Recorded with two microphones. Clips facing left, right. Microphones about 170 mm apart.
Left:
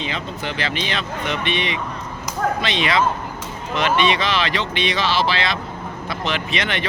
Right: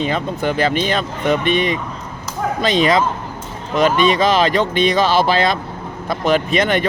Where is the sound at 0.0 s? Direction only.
45° right (ahead or behind).